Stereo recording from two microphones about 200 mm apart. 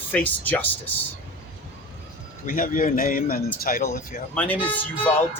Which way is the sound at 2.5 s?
40° left (ahead or behind).